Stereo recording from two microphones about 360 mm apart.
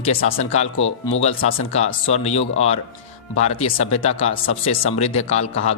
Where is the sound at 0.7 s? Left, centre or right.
Left.